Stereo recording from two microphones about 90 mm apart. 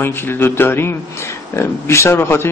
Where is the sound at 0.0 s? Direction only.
25° left (ahead or behind).